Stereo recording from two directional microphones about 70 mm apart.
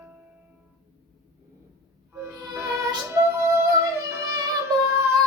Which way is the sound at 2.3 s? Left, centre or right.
Right.